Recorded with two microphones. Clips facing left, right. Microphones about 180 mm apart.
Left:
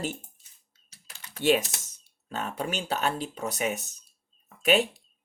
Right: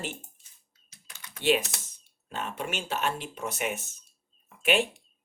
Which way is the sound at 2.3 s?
40° left (ahead or behind).